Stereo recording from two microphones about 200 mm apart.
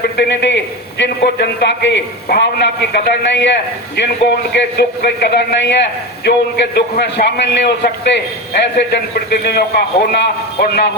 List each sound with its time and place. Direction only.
0.0 s a man's voice: 60° left (ahead or behind)